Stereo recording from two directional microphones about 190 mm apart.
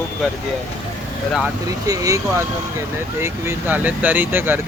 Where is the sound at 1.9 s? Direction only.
15° right (ahead or behind).